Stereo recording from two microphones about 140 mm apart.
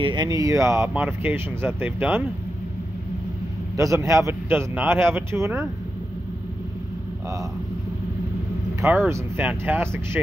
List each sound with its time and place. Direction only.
0.0 s a man's voice: 30° right (ahead or behind); by 2.2 s 15° right (ahead or behind)
3.7 s a man's voice: 20° right (ahead or behind)
9.1 s a man's voice: 15° right (ahead or behind)